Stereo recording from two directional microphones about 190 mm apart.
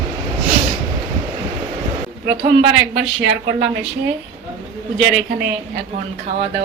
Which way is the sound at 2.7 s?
65° right (ahead or behind).